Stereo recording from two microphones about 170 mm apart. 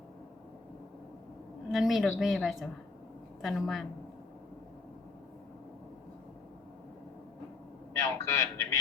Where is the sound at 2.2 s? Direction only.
Centre (ahead or behind).